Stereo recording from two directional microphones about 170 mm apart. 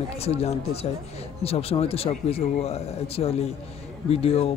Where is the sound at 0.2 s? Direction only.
35° left (ahead or behind).